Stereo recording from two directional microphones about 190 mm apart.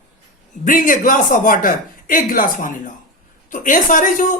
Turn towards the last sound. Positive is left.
turn(degrees=45)  # may be behind; listen again after turning